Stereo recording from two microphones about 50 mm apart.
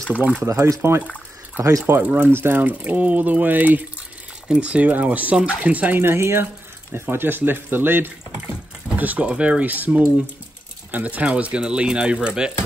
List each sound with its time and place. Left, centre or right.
0.4 s speech: right
1.6 s speech: right
2.0 s speech: right
4.5 s speech: right
5.9 s speech: right
6.9 s speech: right
8.9 s speech: right